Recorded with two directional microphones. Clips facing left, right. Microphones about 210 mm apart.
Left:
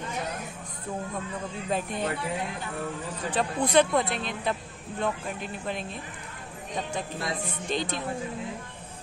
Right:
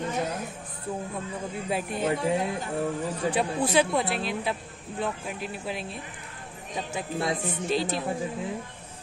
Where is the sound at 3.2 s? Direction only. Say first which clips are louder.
Right 1 dB; 10° right (ahead or behind).